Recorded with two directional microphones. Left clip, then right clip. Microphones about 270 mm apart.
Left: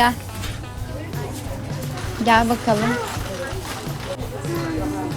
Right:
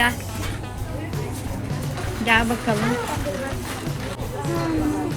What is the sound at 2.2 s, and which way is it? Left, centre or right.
Speech, centre.